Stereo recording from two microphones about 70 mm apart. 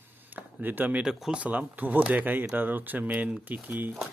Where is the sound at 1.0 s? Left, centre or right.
Centre.